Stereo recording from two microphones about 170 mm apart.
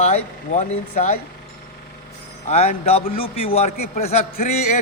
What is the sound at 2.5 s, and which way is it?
A man's voice, 40° left (ahead or behind).